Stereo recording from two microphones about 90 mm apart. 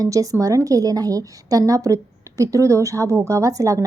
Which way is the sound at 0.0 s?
40° right (ahead or behind).